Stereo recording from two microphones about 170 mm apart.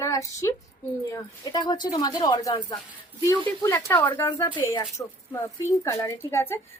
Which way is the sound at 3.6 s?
15° left (ahead or behind).